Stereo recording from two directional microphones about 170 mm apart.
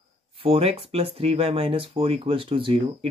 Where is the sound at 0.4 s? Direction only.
35° right (ahead or behind).